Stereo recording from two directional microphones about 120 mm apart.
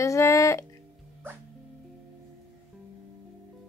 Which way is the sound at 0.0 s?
25° left (ahead or behind).